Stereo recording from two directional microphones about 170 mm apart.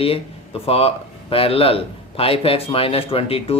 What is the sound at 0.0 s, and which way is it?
Speech, 35° left (ahead or behind).